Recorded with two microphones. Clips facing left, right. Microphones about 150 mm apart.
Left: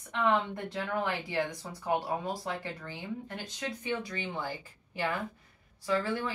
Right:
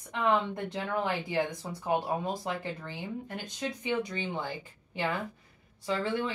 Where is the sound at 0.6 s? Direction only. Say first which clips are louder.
Right 1 dB; 15° right (ahead or behind).